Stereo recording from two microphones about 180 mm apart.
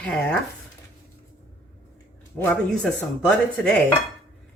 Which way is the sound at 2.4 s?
5° left (ahead or behind).